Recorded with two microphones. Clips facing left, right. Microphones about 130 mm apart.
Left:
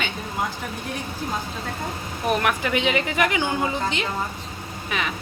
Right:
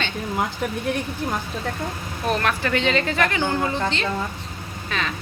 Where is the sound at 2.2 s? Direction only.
15° left (ahead or behind).